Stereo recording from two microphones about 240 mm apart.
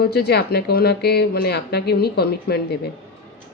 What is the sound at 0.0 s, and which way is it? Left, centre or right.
Speech, left.